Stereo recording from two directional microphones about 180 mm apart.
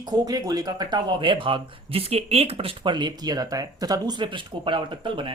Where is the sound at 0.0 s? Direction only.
20° right (ahead or behind).